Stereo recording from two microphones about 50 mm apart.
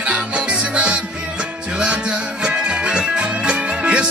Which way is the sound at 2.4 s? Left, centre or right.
Centre.